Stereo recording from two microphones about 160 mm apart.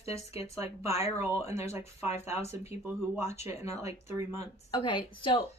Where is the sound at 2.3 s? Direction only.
15° right (ahead or behind).